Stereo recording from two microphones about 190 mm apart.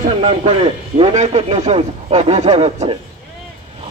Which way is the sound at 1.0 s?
35° right (ahead or behind).